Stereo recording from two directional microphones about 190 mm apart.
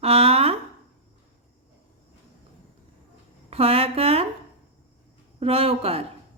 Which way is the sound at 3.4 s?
30° right (ahead or behind).